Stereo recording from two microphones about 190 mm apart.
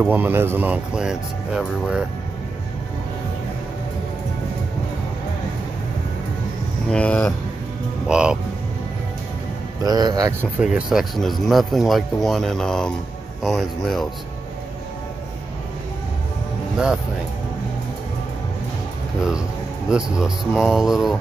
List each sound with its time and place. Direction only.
0.0 s speech: 10° right (ahead or behind)
6.9 s speech: 5° left (ahead or behind)
9.8 s speech: 20° right (ahead or behind)
10.6 s speech: 5° right (ahead or behind)
16.7 s speech: 5° right (ahead or behind)
19.9 s speech: 5° right (ahead or behind)